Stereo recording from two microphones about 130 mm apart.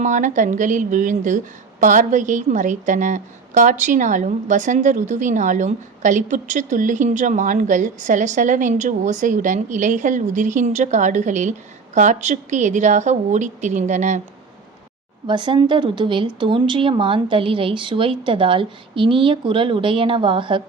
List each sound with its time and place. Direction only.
0.0 s a woman's voice: 75° right (ahead or behind)
15.3 s a woman's voice: 35° right (ahead or behind)